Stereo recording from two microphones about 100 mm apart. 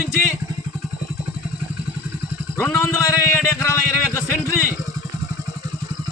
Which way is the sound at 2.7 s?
30° left (ahead or behind).